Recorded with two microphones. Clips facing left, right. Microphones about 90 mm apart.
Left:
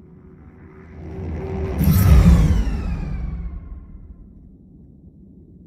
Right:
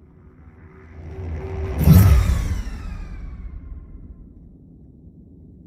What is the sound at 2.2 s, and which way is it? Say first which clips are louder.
Music: left 12 dB; 85° left.